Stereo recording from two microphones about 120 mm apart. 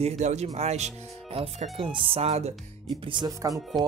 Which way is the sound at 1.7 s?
45° right (ahead or behind).